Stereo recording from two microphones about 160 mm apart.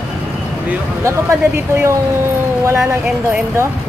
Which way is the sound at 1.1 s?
15° right (ahead or behind).